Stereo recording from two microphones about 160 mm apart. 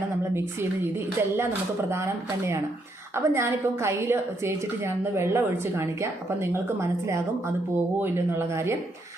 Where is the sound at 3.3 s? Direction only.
15° right (ahead or behind).